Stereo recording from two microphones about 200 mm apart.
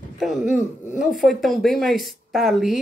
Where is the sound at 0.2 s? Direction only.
Centre (ahead or behind).